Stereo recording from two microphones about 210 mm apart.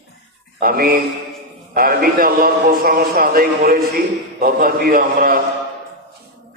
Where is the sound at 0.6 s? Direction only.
45° right (ahead or behind).